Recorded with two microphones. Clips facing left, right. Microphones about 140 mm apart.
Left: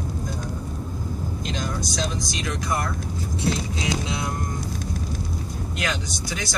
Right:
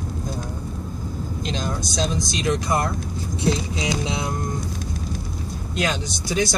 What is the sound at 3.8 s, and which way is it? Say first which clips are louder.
Speech: right 2 dB; 20° right (ahead or behind).